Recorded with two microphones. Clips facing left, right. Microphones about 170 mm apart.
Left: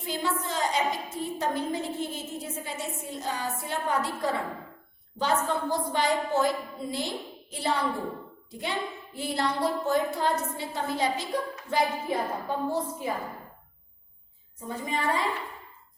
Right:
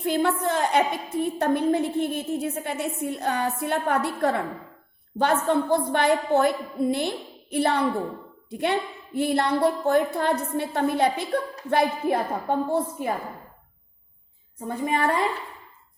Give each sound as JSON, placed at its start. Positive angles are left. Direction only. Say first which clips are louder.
{"t": 0.0, "sound": "a woman's voice", "louder": "right 8 dB", "side_deg": -60}
{"t": 14.7, "sound": "a woman's voice", "louder": "right 5 dB", "side_deg": -55}